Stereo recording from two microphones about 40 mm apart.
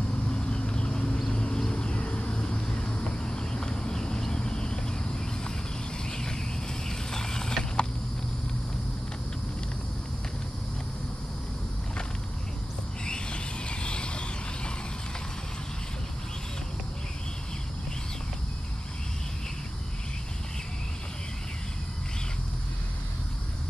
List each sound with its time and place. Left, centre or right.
0.3 s vehicle: left
1.3 s a sound: left
6.0 s vehicle: centre
13.0 s vehicle: left